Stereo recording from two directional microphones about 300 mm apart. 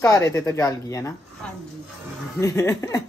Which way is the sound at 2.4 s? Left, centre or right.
Centre.